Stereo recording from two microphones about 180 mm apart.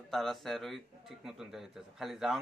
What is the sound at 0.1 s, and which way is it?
A man's voice, centre (ahead or behind).